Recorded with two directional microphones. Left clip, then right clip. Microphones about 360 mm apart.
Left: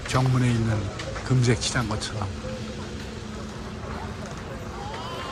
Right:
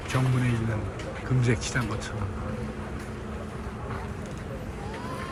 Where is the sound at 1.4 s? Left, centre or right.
Centre.